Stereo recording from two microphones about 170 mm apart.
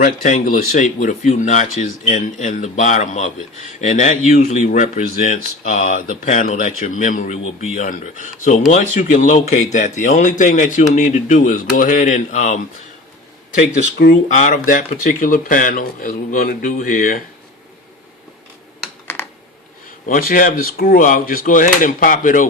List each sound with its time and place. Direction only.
0.0 s speech: 50° left (ahead or behind)
14.0 s speech: 60° left (ahead or behind)
14.3 s speech: 50° left (ahead or behind)
20.1 s speech: 55° left (ahead or behind)